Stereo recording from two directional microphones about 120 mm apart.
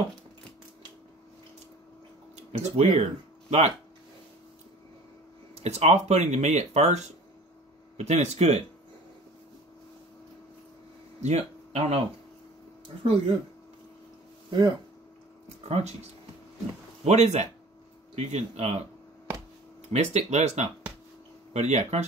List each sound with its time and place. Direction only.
2.6 s speech: 65° right (ahead or behind)
5.5 s speech: 65° right (ahead or behind)
11.2 s speech: 65° right (ahead or behind)
14.5 s speech: 40° right (ahead or behind)
15.7 s speech: 65° right (ahead or behind)
19.9 s speech: 65° right (ahead or behind)